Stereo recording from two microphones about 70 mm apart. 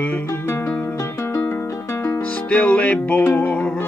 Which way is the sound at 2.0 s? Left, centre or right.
Left.